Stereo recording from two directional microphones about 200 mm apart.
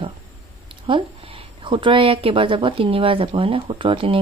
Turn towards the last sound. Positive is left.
turn(degrees=-25)  # may be behind; listen again after turning